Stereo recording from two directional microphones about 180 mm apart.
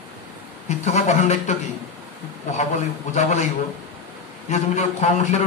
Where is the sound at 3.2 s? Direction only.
40° left (ahead or behind).